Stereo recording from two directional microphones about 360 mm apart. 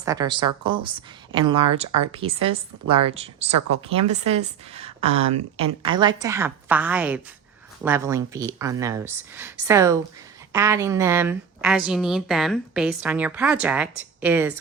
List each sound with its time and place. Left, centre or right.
0.0 s a woman's voice: centre